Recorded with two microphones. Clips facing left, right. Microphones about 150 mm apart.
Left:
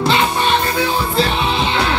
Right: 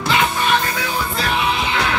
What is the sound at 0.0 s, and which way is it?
Music, 30° left (ahead or behind).